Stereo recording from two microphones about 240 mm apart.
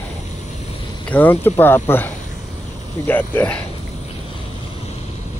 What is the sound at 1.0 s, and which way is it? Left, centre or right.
Speech, centre.